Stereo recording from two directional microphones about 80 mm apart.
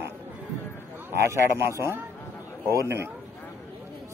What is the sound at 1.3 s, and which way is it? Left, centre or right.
Speech, right.